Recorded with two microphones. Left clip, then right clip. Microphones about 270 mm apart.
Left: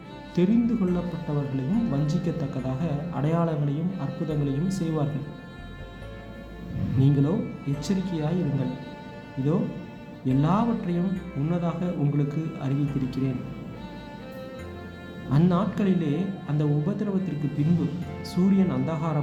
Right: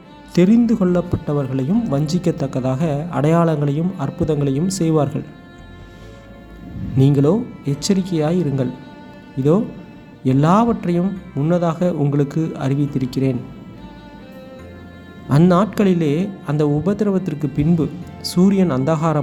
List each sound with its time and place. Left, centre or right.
0.3 s speech: right
7.0 s speech: right
15.3 s speech: right